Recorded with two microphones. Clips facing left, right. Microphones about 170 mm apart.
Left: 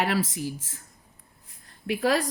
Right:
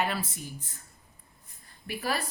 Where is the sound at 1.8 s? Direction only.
75° left (ahead or behind).